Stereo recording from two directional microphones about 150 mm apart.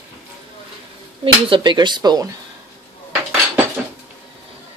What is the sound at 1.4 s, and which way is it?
Speech, 35° right (ahead or behind).